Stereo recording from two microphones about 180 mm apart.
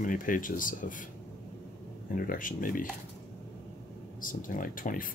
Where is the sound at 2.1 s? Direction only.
50° left (ahead or behind).